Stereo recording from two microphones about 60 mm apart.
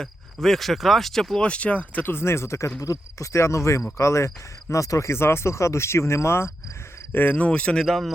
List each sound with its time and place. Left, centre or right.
0.4 s speech: centre
1.4 s speech: centre
2.0 s speech: left
2.8 s speech: left
7.1 s speech: left
7.9 s speech: centre